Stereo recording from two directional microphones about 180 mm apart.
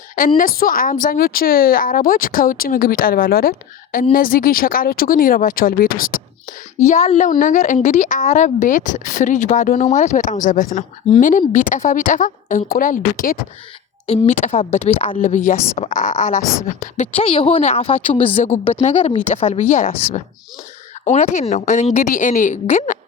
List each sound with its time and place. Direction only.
0.2 s speech: 50° left (ahead or behind)
7.0 s a woman's voice: 35° left (ahead or behind)
7.3 s speech: 45° left (ahead or behind)
14.4 s a woman's voice: 35° left (ahead or behind)
15.8 s speech: 45° left (ahead or behind)
17.2 s a woman's voice: 30° left (ahead or behind)